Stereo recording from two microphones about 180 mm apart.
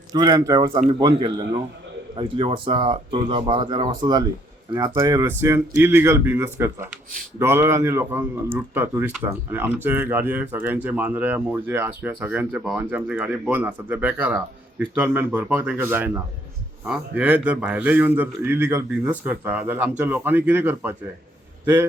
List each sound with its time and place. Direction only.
0.1 s a man's voice: 20° right (ahead or behind)